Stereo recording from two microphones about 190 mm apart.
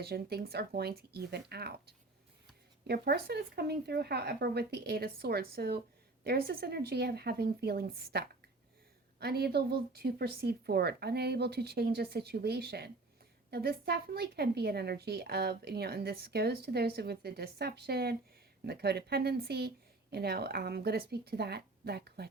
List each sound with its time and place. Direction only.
0.0 s speech: 55° right (ahead or behind)
2.8 s speech: 55° right (ahead or behind)